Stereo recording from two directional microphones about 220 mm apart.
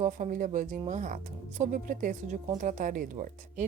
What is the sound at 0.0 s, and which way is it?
Speech, 35° right (ahead or behind).